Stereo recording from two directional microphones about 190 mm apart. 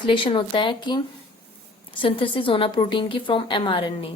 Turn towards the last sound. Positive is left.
turn(degrees=25)  # may be behind; listen again after turning